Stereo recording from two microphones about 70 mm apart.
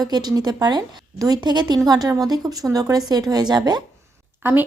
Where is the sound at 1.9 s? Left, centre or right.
Right.